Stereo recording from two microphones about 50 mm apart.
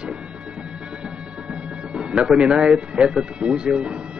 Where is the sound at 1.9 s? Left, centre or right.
Centre.